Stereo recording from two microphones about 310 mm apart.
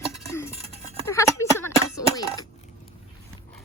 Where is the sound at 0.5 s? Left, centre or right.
Centre.